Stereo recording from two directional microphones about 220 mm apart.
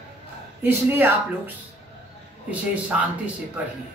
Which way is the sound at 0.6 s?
10° right (ahead or behind).